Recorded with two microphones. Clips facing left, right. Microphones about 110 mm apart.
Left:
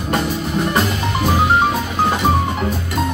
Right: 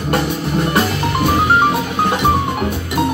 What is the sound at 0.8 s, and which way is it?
Music, centre (ahead or behind).